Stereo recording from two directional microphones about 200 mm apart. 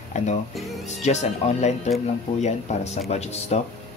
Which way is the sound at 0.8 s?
35° left (ahead or behind).